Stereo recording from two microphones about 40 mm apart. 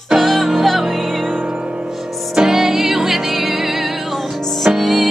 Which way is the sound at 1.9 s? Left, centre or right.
Centre.